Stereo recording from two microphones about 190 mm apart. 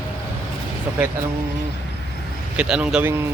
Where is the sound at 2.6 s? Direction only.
5° right (ahead or behind).